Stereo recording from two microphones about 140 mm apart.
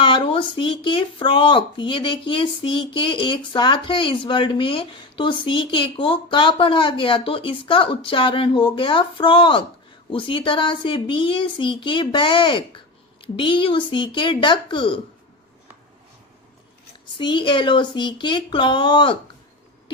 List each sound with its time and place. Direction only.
0.0 s speech: 35° left (ahead or behind)
17.2 s speech: 35° left (ahead or behind)